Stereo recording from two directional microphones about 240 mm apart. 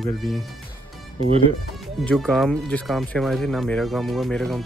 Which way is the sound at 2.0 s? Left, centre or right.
Centre.